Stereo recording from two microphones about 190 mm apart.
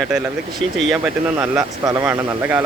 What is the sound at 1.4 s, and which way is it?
Speech, 15° right (ahead or behind).